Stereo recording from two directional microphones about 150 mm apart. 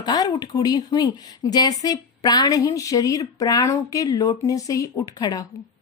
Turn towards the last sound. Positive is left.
turn(degrees=25)  # may be behind; listen again after turning